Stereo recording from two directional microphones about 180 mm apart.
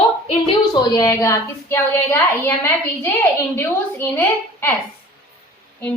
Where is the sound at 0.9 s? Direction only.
20° left (ahead or behind).